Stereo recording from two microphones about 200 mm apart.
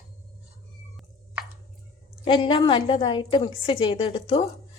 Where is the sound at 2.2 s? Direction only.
25° left (ahead or behind).